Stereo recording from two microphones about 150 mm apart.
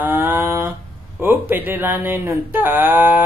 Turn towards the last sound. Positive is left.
turn(degrees=-10)  # may be behind; listen again after turning